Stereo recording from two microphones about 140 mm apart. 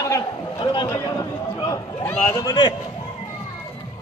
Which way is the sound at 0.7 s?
30° left (ahead or behind).